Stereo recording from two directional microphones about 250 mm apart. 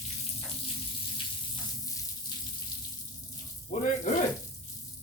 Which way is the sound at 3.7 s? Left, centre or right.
Left.